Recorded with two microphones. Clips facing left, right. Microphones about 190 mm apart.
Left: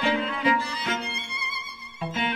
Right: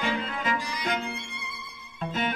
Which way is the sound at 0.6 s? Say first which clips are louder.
Left 3 dB; 15° right (ahead or behind).